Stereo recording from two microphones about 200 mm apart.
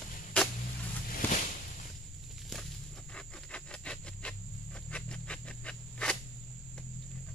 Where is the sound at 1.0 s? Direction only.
45° left (ahead or behind).